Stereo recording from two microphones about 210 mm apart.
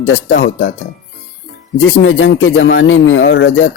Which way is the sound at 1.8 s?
65° left (ahead or behind).